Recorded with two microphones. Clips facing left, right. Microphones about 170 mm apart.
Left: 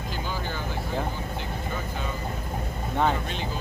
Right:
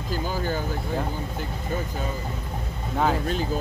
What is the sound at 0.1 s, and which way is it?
Vehicle, 45° right (ahead or behind).